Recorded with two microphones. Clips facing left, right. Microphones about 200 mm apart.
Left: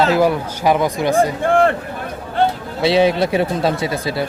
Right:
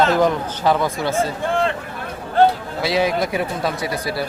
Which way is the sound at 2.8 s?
25° left (ahead or behind).